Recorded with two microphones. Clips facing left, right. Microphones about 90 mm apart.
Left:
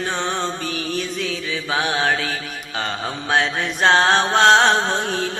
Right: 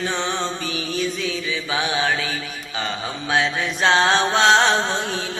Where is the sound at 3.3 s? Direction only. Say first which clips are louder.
Left 1 dB; 50° left (ahead or behind).